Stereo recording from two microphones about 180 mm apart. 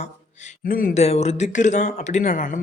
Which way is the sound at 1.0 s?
35° left (ahead or behind).